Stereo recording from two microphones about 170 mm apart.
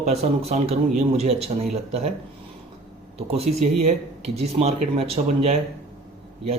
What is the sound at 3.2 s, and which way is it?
A man's voice, 35° right (ahead or behind).